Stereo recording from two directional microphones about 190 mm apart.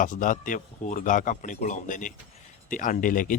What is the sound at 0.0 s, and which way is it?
A man's voice, 45° left (ahead or behind).